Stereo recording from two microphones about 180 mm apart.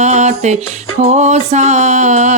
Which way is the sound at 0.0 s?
40° right (ahead or behind).